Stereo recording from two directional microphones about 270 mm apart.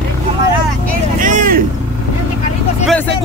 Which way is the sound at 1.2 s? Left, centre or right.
Right.